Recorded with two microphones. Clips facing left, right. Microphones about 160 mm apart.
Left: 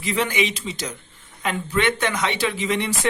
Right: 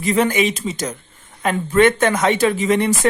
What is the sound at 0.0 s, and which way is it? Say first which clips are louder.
A man's voice: right 6 dB; 45° right (ahead or behind).